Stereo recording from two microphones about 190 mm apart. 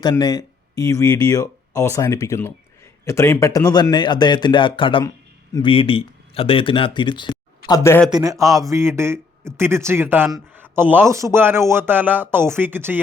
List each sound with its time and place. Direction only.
0.0 s a man's voice: 20° left (ahead or behind)
7.7 s a man's voice: 15° left (ahead or behind)
8.1 s speech: 15° right (ahead or behind)